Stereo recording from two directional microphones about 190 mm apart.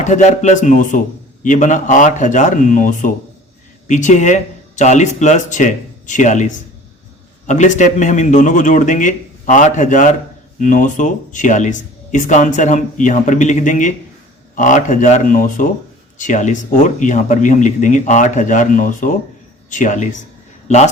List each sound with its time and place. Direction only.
0.0 s speech: 40° left (ahead or behind)